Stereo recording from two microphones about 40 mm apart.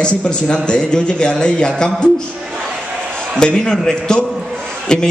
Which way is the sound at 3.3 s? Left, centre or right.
Left.